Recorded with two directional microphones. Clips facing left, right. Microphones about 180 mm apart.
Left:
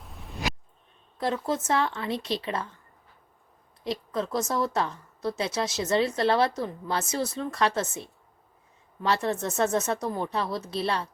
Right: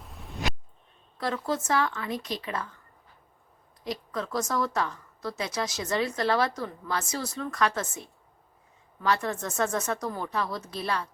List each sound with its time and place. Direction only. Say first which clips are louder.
0.0 s a sound: even; centre (ahead or behind)
1.2 s a woman's voice: left 2 dB; 20° left (ahead or behind)
3.8 s a woman's voice: left 3 dB; 25° left (ahead or behind)